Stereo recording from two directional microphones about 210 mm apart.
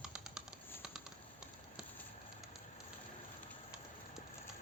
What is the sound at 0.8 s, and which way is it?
Typing, 5° right (ahead or behind).